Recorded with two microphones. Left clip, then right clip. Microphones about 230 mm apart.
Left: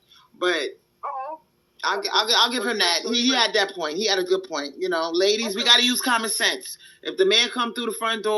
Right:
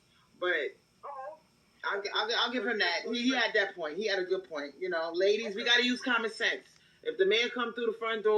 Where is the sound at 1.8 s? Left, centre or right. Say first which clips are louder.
Left 10 dB; left.